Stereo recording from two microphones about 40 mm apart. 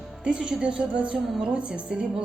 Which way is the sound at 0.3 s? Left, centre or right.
Right.